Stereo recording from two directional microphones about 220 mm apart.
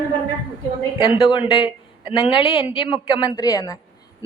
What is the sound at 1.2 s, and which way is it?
A woman's voice, 20° left (ahead or behind).